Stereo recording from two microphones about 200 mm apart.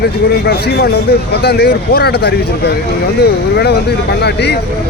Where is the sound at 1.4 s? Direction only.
55° left (ahead or behind).